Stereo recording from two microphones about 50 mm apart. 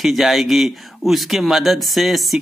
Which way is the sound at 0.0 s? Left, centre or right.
Centre.